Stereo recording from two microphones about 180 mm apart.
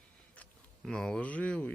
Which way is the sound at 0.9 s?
5° left (ahead or behind).